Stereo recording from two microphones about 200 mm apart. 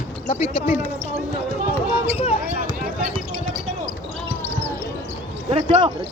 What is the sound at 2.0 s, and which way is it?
Speech, 30° left (ahead or behind).